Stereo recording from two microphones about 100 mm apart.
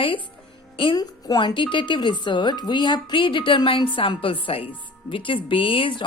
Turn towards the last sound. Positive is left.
turn(degrees=60)  # may be behind; listen again after turning